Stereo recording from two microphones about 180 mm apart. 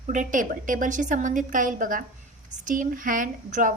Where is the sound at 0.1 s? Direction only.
45° right (ahead or behind).